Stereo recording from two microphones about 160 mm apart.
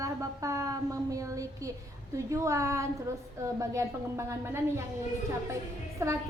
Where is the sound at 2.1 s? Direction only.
20° right (ahead or behind).